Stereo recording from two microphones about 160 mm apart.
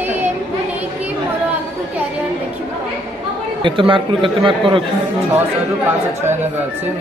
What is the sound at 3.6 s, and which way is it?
Speech, 30° right (ahead or behind).